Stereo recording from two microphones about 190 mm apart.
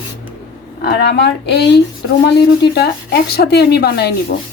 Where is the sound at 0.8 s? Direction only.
60° left (ahead or behind).